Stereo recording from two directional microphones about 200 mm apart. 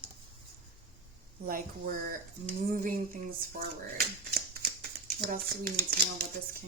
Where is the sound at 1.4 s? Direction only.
45° right (ahead or behind).